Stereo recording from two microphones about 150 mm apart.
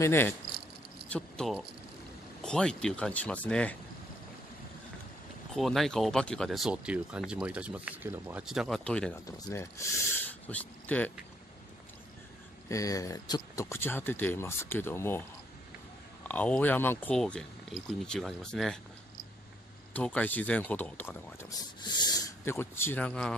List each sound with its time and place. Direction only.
0.0 s speech: 15° left (ahead or behind)
5.6 s speech: centre (ahead or behind)
9.1 s speech: 20° left (ahead or behind)
12.6 s speech: 20° left (ahead or behind)
16.3 s speech: 10° left (ahead or behind)
19.9 s speech: 10° left (ahead or behind)
21.5 s speech: 25° left (ahead or behind)
22.4 s speech: 15° left (ahead or behind)